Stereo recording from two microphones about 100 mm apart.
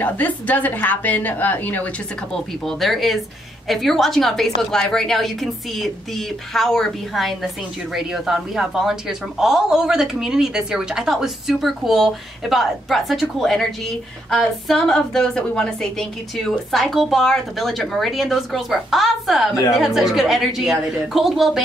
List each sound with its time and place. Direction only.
0.0 s a woman's voice: 15° left (ahead or behind)
2.3 s a woman's voice: centre (ahead or behind)